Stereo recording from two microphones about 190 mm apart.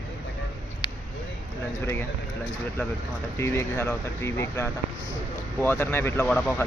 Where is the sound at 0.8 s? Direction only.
25° left (ahead or behind).